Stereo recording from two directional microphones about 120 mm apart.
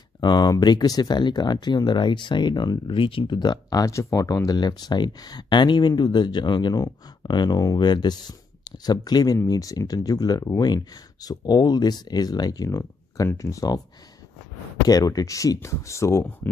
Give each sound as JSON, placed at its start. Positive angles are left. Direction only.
{"t": 0.2, "sound": "speech", "side_deg": 35}
{"t": 14.9, "sound": "speech", "side_deg": 30}